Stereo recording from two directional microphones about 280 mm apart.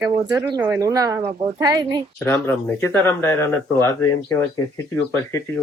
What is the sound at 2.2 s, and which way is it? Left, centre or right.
Speech, centre.